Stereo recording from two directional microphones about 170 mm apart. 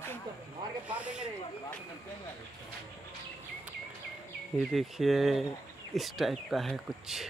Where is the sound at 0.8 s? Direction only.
5° right (ahead or behind).